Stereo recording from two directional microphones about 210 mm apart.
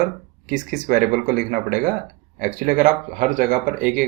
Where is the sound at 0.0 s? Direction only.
40° right (ahead or behind).